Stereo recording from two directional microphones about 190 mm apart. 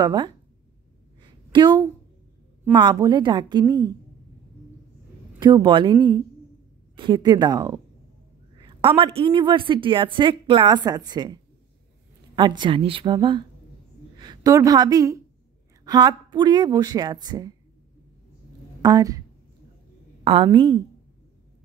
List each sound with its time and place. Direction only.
0.0 s a woman's voice: 25° right (ahead or behind)
1.2 s a sound: 25° right (ahead or behind)
2.7 s a woman's voice: 20° right (ahead or behind)
5.4 s a woman's voice: 25° right (ahead or behind)
12.4 s a woman's voice: 25° right (ahead or behind)
18.8 s a woman's voice: 20° right (ahead or behind)
20.5 s a woman's voice: 25° right (ahead or behind)